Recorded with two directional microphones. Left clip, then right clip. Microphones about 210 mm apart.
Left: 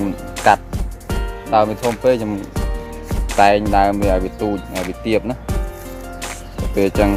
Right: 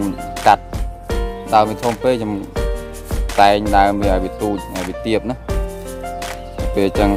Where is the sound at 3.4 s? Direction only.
20° right (ahead or behind).